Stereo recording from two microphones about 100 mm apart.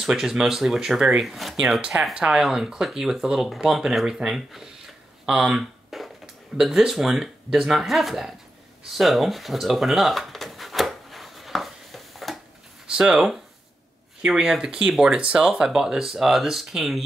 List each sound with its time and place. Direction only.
0.0 s speech: 5° right (ahead or behind)
8.9 s drawer open or close: centre (ahead or behind)
12.8 s speech: 10° right (ahead or behind)